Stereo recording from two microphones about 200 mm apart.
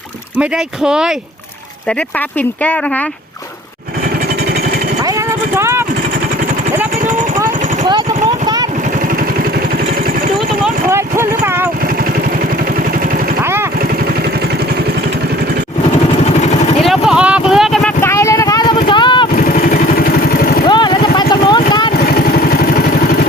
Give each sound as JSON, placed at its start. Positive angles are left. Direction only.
{"t": 0.3, "sound": "speech", "side_deg": -5}
{"t": 2.4, "sound": "speech", "side_deg": 5}
{"t": 5.5, "sound": "vehicle", "side_deg": -15}
{"t": 10.8, "sound": "a sound", "side_deg": -15}
{"t": 13.4, "sound": "vehicle", "side_deg": -10}
{"t": 16.8, "sound": "vehicle", "side_deg": 0}
{"t": 18.0, "sound": "vehicle", "side_deg": 15}
{"t": 20.7, "sound": "vehicle", "side_deg": 20}
{"t": 21.9, "sound": "vehicle", "side_deg": 50}